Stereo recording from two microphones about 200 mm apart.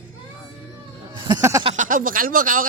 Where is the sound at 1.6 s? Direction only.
35° right (ahead or behind).